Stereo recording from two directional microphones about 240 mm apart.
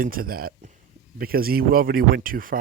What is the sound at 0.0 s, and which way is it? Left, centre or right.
Speech, right.